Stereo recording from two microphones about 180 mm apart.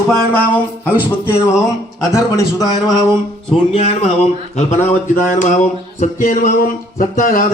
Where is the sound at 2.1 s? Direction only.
20° left (ahead or behind).